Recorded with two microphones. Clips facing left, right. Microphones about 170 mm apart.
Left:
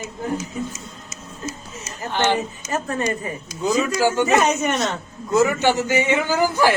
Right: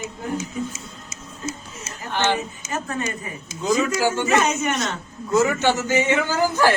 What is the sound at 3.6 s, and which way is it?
Speech, 15° left (ahead or behind).